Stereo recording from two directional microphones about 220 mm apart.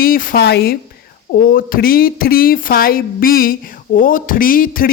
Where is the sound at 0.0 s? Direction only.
40° left (ahead or behind).